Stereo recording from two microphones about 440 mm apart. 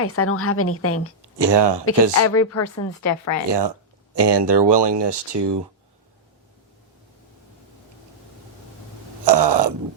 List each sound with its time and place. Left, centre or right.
0.0 s a woman's voice: left
1.2 s speech: right
2.1 s speech: left
3.5 s speech: right
9.2 s a sound: right